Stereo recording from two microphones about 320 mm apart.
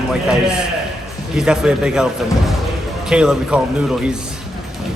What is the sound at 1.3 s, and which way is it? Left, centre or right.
A man's voice, centre.